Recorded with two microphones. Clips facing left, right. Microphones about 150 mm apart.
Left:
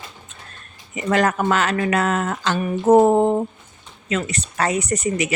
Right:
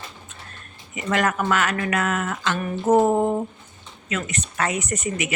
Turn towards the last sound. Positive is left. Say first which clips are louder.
# left 5 dB
turn(degrees=35)  # may be behind; listen again after turning